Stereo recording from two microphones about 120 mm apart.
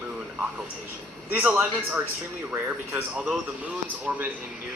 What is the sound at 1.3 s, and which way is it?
Speech, 15° right (ahead or behind).